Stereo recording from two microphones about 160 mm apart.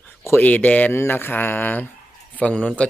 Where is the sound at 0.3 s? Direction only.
10° left (ahead or behind).